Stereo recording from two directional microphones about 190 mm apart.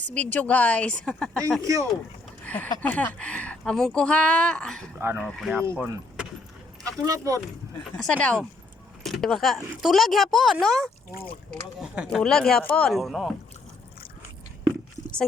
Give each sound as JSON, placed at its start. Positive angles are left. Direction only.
{"t": 0.0, "sound": "a woman's voice", "side_deg": 5}
{"t": 5.5, "sound": "speech", "side_deg": -10}
{"t": 7.0, "sound": "speech", "side_deg": -15}
{"t": 7.9, "sound": "a woman's voice", "side_deg": 5}
{"t": 11.1, "sound": "speech", "side_deg": 50}
{"t": 11.8, "sound": "a woman's voice", "side_deg": 0}